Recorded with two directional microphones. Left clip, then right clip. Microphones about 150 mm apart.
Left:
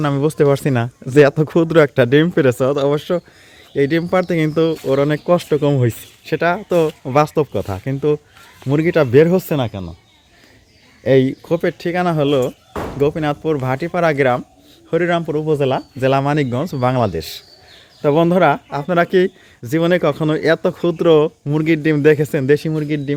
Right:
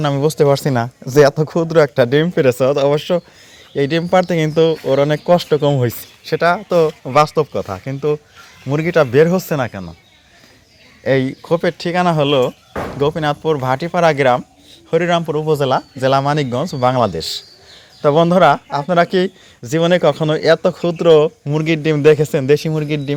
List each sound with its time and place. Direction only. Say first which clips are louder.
0.0 s speech: right 1 dB; 30° left (ahead or behind)
6.2 s speech: right 2 dB; 50° left (ahead or behind)
11.0 s speech: left 2 dB; 60° left (ahead or behind)
11.4 s speech: right 2 dB; 35° left (ahead or behind)
11.8 s speech: right 2 dB; 20° left (ahead or behind)